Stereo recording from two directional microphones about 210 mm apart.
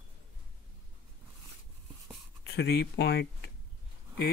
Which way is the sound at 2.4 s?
50° left (ahead or behind).